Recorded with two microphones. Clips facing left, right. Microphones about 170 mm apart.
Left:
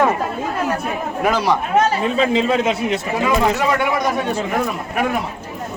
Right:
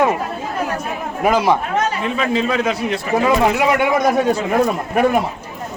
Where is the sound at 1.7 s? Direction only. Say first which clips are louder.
Left 3 dB; 30° left (ahead or behind).